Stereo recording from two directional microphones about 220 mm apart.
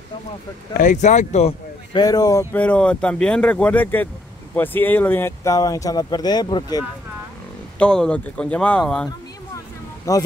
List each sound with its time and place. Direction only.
0.7 s speech: 35° left (ahead or behind)
2.0 s speech: 15° left (ahead or behind)
7.8 s speech: 5° left (ahead or behind)
10.1 s speech: 15° left (ahead or behind)